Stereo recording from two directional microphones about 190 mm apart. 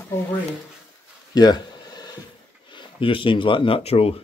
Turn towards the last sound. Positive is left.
turn(degrees=30)  # may be behind; listen again after turning